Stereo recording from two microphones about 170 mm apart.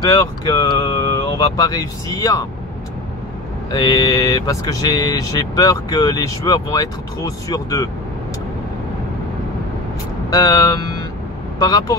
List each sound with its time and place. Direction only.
0.0 s speech: 20° left (ahead or behind)
3.7 s speech: 25° left (ahead or behind)
10.3 s speech: 20° left (ahead or behind)